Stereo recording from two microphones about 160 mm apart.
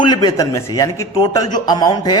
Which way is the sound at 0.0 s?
25° left (ahead or behind).